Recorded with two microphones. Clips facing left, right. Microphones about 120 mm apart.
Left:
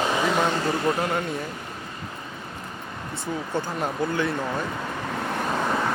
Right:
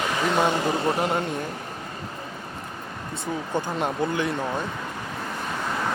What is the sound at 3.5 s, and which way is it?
Speech, 15° right (ahead or behind).